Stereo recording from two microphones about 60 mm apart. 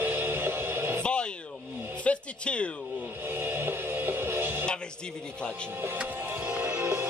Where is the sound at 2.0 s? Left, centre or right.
Centre.